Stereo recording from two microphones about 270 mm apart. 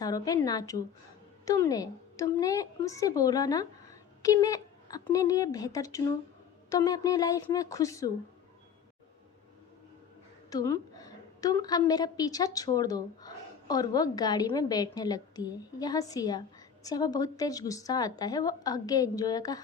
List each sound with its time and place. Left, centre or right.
0.0 s a woman's voice: centre
10.5 s a woman's voice: centre